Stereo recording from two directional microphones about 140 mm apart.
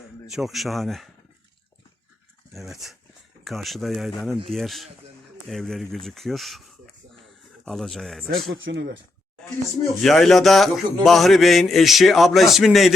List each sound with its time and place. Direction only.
0.3 s a man's voice: centre (ahead or behind)
2.5 s a man's voice: centre (ahead or behind)
7.7 s a man's voice: centre (ahead or behind)
10.0 s a man's voice: centre (ahead or behind)